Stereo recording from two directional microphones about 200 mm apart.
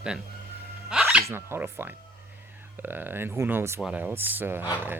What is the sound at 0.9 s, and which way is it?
Dog, 5° right (ahead or behind).